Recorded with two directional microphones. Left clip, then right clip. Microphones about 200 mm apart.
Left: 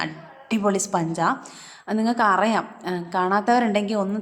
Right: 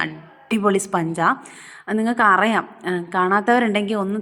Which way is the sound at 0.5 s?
15° right (ahead or behind).